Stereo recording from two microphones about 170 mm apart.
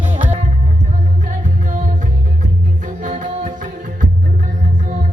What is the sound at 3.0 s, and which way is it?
Music, 45° right (ahead or behind).